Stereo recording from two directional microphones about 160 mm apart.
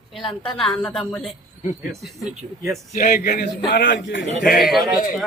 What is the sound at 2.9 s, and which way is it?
A man's voice, 60° left (ahead or behind).